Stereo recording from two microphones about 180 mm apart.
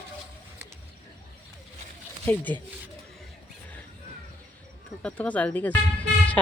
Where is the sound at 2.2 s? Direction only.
10° left (ahead or behind).